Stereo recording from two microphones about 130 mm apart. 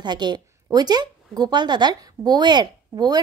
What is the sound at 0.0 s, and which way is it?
A woman's voice, 35° right (ahead or behind).